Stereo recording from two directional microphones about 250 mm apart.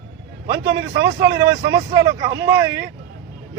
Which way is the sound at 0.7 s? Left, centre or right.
Right.